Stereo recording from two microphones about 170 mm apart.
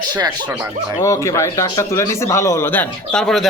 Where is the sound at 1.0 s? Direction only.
20° left (ahead or behind).